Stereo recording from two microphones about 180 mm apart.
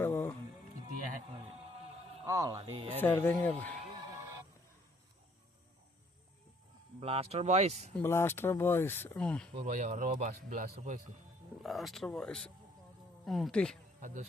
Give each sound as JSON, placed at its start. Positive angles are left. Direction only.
{"t": 0.0, "sound": "music", "side_deg": 10}
{"t": 1.3, "sound": "a sound", "side_deg": -30}
{"t": 2.2, "sound": "speech", "side_deg": -20}
{"t": 2.6, "sound": "speech", "side_deg": -30}
{"t": 3.0, "sound": "speech", "side_deg": 10}
{"t": 7.0, "sound": "speech", "side_deg": -35}
{"t": 7.9, "sound": "speech", "side_deg": 15}
{"t": 9.6, "sound": "a man's voice", "side_deg": -45}
{"t": 11.6, "sound": "speech", "side_deg": 0}